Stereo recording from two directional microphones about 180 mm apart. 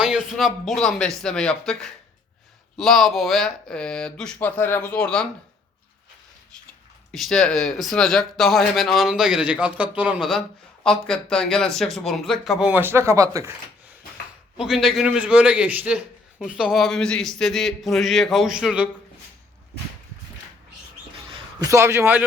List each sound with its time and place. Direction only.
0.0 s a man's voice: centre (ahead or behind)
7.1 s a man's voice: centre (ahead or behind); by 13.5 s 20° right (ahead or behind)
14.6 s a man's voice: centre (ahead or behind)
21.2 s a man's voice: 25° right (ahead or behind)